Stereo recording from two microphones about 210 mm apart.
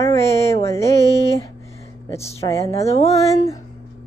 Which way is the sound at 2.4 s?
15° left (ahead or behind).